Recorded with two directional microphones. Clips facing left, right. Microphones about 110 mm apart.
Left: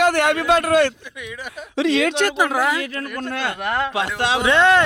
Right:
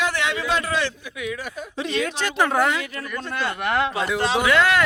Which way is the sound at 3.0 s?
55° left (ahead or behind).